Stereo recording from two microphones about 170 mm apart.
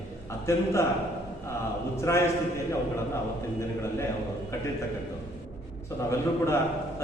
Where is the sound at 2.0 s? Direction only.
15° left (ahead or behind).